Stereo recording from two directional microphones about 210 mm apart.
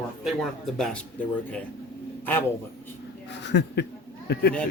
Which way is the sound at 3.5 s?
55° left (ahead or behind).